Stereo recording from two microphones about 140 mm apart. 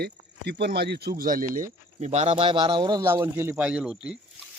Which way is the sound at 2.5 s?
30° right (ahead or behind).